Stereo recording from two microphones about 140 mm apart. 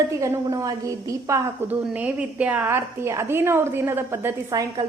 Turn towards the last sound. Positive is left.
turn(degrees=-25)  # may be behind; listen again after turning